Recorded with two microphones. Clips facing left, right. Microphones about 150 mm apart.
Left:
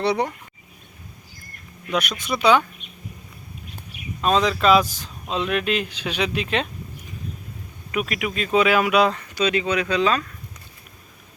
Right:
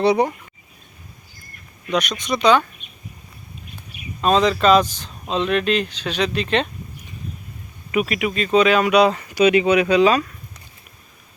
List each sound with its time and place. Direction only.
0.0 s speech: 15° right (ahead or behind)
1.9 s speech: 5° left (ahead or behind)
4.2 s speech: centre (ahead or behind)
7.9 s speech: 5° right (ahead or behind)
9.3 s speech: 15° right (ahead or behind)